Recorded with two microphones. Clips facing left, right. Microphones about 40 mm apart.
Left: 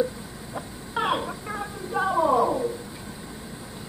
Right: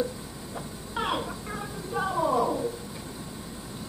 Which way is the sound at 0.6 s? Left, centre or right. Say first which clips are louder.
Left 4 dB; centre.